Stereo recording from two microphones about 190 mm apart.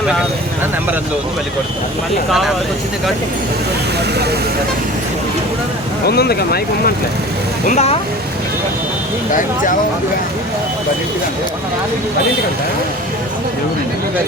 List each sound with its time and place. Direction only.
6.1 s speech: 55° left (ahead or behind)
7.7 s speech: 35° left (ahead or behind)